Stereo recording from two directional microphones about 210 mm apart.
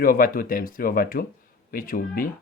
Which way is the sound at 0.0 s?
40° left (ahead or behind).